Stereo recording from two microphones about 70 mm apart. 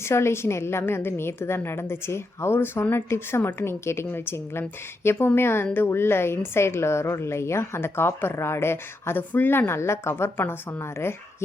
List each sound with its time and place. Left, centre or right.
0.0 s a woman's voice: left